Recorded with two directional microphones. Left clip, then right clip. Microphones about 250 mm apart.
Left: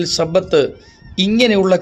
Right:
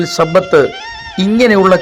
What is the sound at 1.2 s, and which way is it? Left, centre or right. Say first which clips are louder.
Speech: right 4 dB; centre.